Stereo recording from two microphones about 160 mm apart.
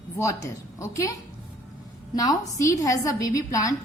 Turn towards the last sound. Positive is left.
turn(degrees=20)  # may be behind; listen again after turning